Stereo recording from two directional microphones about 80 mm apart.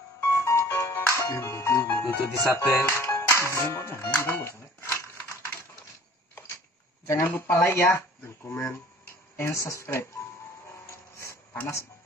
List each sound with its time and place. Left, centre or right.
0.5 s music: left
1.2 s speech: left
1.9 s music: left
4.2 s speech: left
7.1 s speech: left
11.1 s a sound: left